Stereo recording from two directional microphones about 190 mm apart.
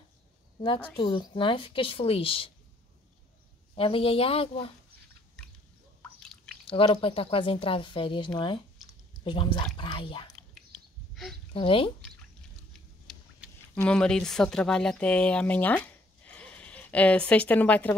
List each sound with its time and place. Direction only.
0.9 s speech: 25° left (ahead or behind)
3.7 s speech: 30° left (ahead or behind)
6.7 s speech: 30° left (ahead or behind)
11.5 s speech: 30° left (ahead or behind)
13.0 s a sound: centre (ahead or behind)
13.7 s speech: 5° left (ahead or behind)